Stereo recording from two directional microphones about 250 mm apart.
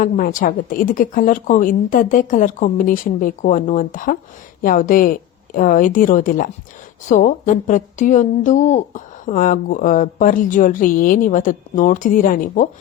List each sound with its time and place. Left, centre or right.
0.0 s a woman's voice: left